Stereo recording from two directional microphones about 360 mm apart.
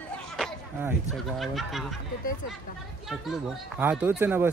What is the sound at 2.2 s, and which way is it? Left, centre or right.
Speech, left.